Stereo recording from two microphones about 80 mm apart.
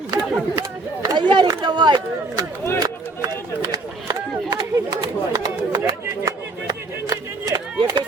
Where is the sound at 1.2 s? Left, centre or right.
Right.